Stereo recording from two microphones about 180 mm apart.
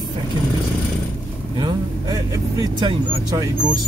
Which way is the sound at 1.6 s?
20° right (ahead or behind).